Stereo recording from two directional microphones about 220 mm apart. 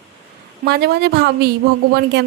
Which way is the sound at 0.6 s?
45° right (ahead or behind).